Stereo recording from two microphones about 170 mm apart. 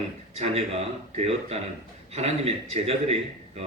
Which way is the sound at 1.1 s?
35° right (ahead or behind).